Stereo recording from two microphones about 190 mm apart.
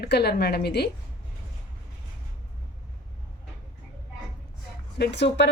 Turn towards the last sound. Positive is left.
turn(degrees=65)  # may be behind; listen again after turning